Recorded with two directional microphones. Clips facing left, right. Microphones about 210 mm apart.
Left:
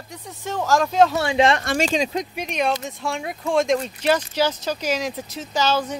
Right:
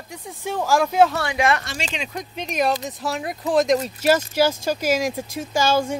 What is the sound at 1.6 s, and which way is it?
Speech, 50° left (ahead or behind).